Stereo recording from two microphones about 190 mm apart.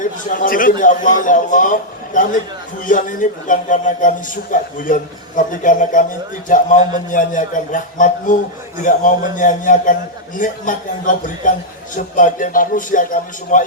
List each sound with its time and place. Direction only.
0.0 s a man's voice: 45° left (ahead or behind)